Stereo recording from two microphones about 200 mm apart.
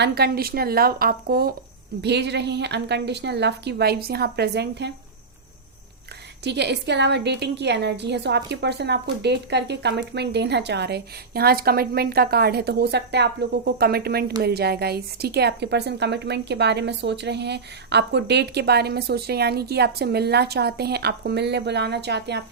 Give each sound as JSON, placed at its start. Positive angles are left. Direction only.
{"t": 0.0, "sound": "a woman's voice", "side_deg": -55}
{"t": 6.4, "sound": "a woman's voice", "side_deg": -55}